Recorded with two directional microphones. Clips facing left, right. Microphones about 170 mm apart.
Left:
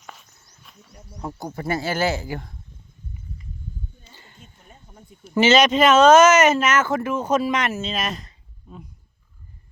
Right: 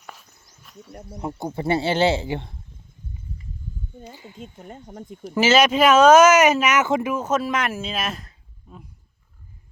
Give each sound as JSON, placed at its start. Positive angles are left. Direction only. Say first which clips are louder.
{"t": 0.0, "sound": "a sound", "louder": "even", "side_deg": 0}
{"t": 1.5, "sound": "speech", "louder": "right 4 dB", "side_deg": -25}
{"t": 4.1, "sound": "speech", "louder": "right 9 dB", "side_deg": -10}
{"t": 4.4, "sound": "speech", "louder": "right 13 dB", "side_deg": -85}
{"t": 5.3, "sound": "speech", "louder": "left 1 dB", "side_deg": -5}
{"t": 7.2, "sound": "speech", "louder": "left 2 dB", "side_deg": 0}